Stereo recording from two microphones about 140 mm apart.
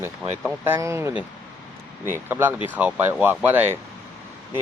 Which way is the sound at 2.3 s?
15° right (ahead or behind).